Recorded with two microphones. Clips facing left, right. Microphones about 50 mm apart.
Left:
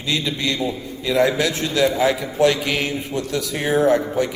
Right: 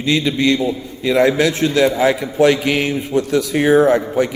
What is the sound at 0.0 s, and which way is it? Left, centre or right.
A man's voice, right.